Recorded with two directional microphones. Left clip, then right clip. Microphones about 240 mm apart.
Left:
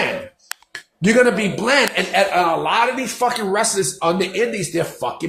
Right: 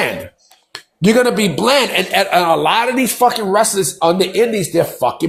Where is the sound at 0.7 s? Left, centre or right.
Right.